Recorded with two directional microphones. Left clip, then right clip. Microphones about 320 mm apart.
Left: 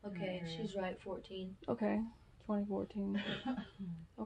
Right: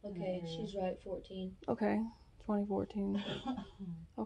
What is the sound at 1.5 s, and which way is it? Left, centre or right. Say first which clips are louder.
Speech: right 3 dB; right.